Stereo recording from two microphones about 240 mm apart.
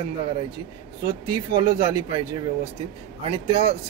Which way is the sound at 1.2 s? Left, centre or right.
Centre.